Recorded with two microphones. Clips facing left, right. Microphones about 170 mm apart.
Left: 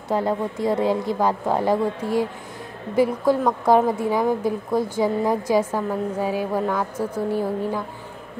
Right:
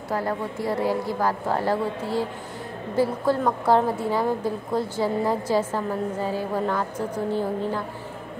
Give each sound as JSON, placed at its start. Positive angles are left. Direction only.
{"t": 0.1, "sound": "a woman's voice", "side_deg": 20}